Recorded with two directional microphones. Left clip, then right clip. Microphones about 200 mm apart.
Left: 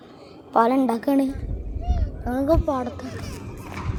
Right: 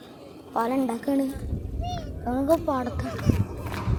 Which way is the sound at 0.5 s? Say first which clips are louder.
Left 7 dB; 50° left (ahead or behind).